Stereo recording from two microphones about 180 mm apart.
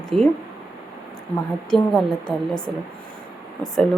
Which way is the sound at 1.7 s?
Centre (ahead or behind).